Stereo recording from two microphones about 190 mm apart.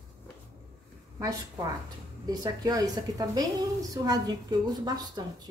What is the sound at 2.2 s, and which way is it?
A woman's voice, 20° right (ahead or behind).